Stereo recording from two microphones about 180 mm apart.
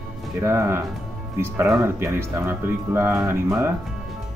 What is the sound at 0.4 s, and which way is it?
Speech, 15° right (ahead or behind).